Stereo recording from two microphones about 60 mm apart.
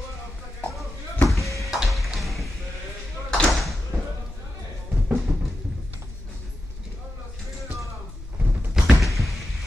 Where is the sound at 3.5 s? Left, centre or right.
Centre.